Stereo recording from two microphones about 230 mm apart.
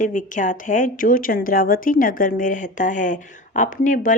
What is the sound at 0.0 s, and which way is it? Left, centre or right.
Speech, left.